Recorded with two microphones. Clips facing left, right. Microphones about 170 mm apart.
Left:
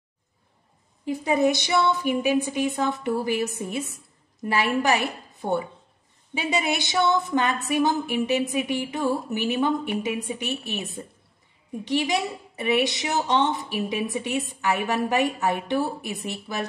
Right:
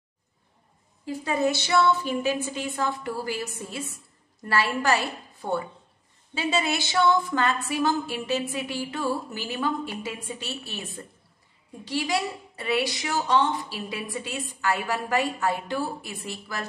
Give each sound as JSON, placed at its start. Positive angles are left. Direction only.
{"t": 1.0, "sound": "a woman's voice", "side_deg": 20}